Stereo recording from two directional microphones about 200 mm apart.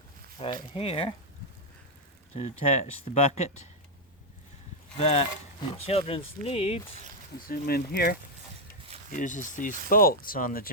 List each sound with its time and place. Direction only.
0.7 s speech: 30° left (ahead or behind)
2.3 s speech: 35° left (ahead or behind)
4.9 s speech: 30° left (ahead or behind)
7.3 s speech: 50° left (ahead or behind)
9.1 s speech: 40° left (ahead or behind)